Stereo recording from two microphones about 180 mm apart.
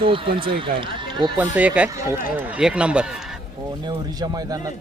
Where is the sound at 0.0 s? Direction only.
30° right (ahead or behind).